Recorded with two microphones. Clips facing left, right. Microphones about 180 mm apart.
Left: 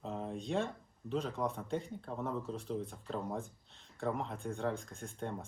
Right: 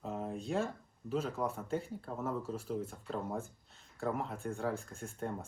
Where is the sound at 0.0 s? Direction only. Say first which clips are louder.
Right 1 dB; centre (ahead or behind).